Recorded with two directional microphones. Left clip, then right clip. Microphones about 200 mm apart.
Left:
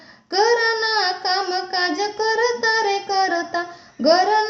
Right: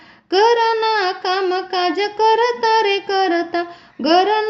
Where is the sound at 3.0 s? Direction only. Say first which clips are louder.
Right 2 dB; 25° right (ahead or behind).